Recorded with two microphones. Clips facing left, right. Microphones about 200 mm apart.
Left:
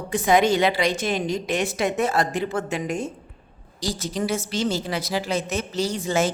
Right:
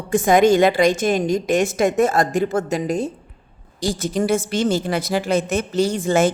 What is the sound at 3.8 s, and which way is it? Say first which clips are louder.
A woman's voice: right 5 dB; 55° right (ahead or behind).